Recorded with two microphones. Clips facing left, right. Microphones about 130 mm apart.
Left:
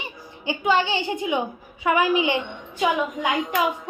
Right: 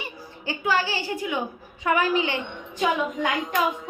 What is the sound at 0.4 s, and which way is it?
A woman's voice, 20° left (ahead or behind).